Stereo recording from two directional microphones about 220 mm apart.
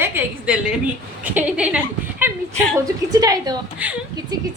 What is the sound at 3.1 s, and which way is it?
Speech, 15° right (ahead or behind).